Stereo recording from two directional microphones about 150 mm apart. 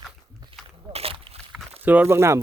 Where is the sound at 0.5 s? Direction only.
40° right (ahead or behind).